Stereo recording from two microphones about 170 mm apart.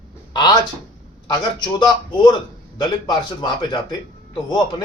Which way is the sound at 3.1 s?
25° left (ahead or behind).